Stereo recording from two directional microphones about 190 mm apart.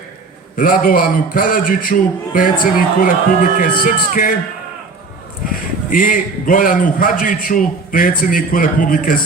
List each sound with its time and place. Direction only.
0.5 s a man's voice: 45° left (ahead or behind)
5.5 s a man's voice: 45° left (ahead or behind)